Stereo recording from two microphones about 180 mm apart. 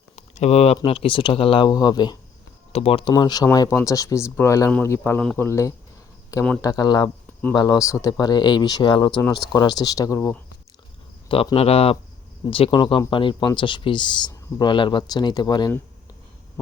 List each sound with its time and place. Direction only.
0.2 s a sound: 35° left (ahead or behind)
0.9 s a man's voice: 30° left (ahead or behind); by 5.5 s 5° left (ahead or behind)
5.5 s a man's voice: 15° left (ahead or behind)
11.3 s speech: 30° left (ahead or behind)